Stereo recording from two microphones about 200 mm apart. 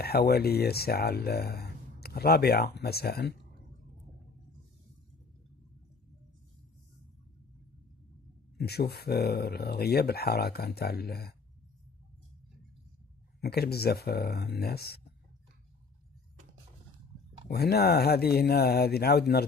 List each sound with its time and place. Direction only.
0.0 s speech: 50° left (ahead or behind)
8.5 s speech: 55° left (ahead or behind)
13.4 s speech: 50° left (ahead or behind)
17.5 s speech: 50° left (ahead or behind)